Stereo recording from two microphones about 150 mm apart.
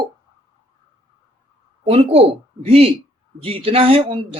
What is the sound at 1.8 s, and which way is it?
Speech, 40° right (ahead or behind).